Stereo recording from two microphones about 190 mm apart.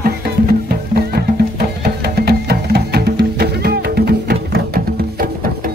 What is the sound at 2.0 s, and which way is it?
Music, 55° right (ahead or behind).